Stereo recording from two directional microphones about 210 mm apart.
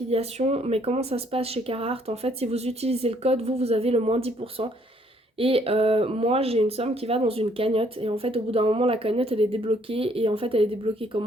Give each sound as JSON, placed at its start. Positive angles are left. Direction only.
{"t": 0.1, "sound": "speech", "side_deg": -30}